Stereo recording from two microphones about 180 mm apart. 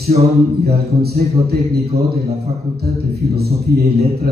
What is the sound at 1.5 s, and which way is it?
A man's voice, 60° right (ahead or behind).